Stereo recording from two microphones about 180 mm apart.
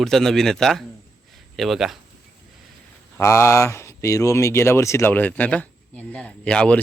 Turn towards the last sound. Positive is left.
turn(degrees=5)  # may be behind; listen again after turning